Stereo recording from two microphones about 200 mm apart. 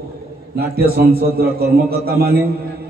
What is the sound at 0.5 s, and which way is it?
A man's voice, 50° right (ahead or behind).